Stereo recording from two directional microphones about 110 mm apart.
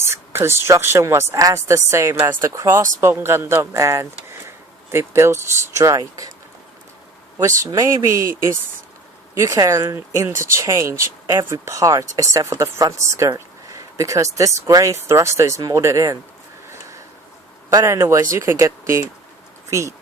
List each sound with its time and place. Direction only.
0.1 s speech: 20° right (ahead or behind)
7.3 s speech: 30° right (ahead or behind)
17.7 s speech: 35° right (ahead or behind)